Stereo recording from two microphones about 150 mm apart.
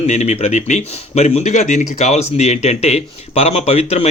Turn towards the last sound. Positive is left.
turn(degrees=40)  # may be behind; listen again after turning